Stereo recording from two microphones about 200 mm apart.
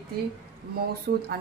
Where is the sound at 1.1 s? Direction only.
45° right (ahead or behind).